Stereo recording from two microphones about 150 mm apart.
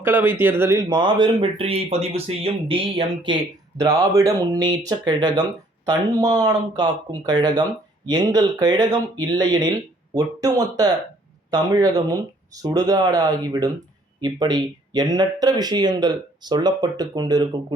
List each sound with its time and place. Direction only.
0.0 s speech: 10° right (ahead or behind); by 3.3 s 35° right (ahead or behind)
3.8 s speech: 25° right (ahead or behind)